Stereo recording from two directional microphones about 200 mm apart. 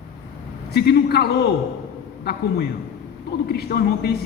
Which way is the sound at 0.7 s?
55° left (ahead or behind).